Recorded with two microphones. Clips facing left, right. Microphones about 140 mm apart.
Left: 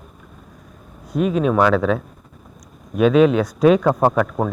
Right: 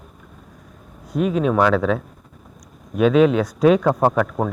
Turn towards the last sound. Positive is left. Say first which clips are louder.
# left 1 dB
turn(degrees=15)  # may be behind; listen again after turning